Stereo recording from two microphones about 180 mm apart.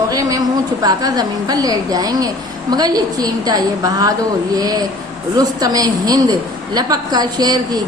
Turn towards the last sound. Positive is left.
turn(degrees=-20)  # may be behind; listen again after turning